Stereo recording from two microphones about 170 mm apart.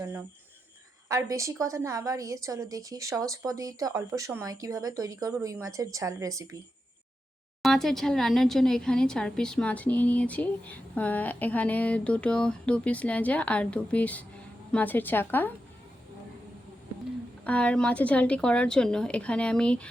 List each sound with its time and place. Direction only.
1.0 s a woman's voice: 20° right (ahead or behind)
7.6 s speech: centre (ahead or behind)
17.4 s speech: 5° left (ahead or behind)